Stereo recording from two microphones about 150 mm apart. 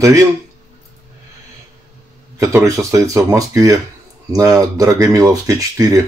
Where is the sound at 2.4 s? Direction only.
20° right (ahead or behind).